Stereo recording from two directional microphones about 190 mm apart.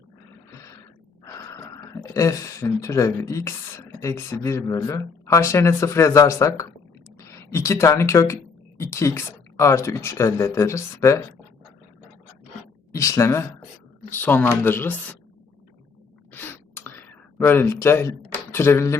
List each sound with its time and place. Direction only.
1.2 s gasp: 15° left (ahead or behind)
2.1 s speech: 15° left (ahead or behind)
12.9 s a woman's voice: 15° left (ahead or behind)
16.3 s gasp: 10° left (ahead or behind)
18.5 s speech: 10° left (ahead or behind)